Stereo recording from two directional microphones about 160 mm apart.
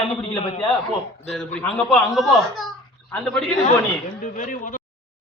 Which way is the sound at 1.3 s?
5° left (ahead or behind).